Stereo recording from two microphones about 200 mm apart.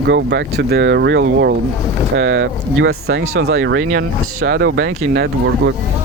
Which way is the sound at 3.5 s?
85° right.